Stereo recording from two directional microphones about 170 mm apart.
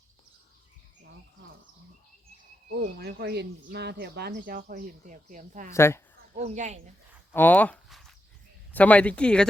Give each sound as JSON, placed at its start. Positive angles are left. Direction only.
{"t": 2.6, "sound": "speech", "side_deg": -65}
{"t": 5.7, "sound": "speech", "side_deg": 15}
{"t": 6.3, "sound": "speech", "side_deg": -45}
{"t": 7.3, "sound": "speech", "side_deg": 10}